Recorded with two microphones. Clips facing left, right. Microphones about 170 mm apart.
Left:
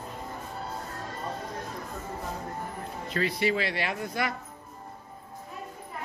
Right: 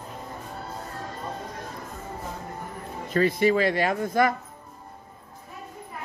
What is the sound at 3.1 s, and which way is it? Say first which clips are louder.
Speech: right 7 dB; 45° right (ahead or behind).